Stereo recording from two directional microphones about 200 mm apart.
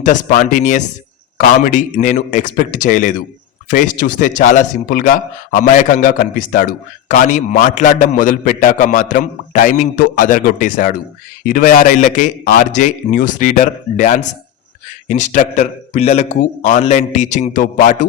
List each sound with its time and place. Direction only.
0.0 s a man's voice: 45° left (ahead or behind)